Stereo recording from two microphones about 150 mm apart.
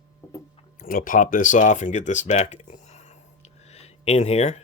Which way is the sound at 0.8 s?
70° left (ahead or behind).